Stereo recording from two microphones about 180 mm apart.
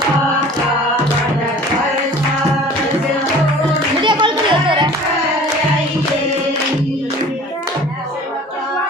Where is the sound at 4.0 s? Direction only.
25° right (ahead or behind).